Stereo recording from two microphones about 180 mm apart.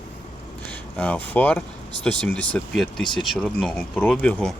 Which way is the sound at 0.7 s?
5° left (ahead or behind).